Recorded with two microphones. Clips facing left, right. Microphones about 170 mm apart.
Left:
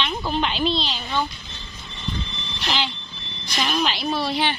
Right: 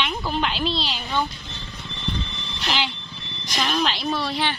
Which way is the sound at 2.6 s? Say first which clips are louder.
Even; 10° right (ahead or behind).